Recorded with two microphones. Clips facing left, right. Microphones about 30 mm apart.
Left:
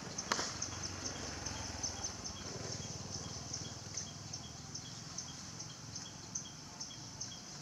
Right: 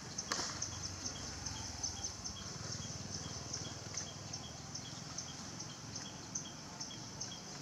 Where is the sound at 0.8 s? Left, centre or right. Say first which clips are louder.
Left 2 dB; centre.